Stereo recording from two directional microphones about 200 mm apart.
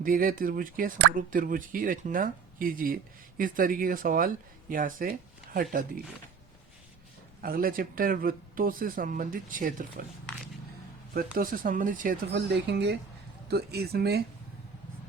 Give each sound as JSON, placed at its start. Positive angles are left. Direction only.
{"t": 0.0, "sound": "speech", "side_deg": -45}
{"t": 7.4, "sound": "speech", "side_deg": -45}
{"t": 11.3, "sound": "speech", "side_deg": -45}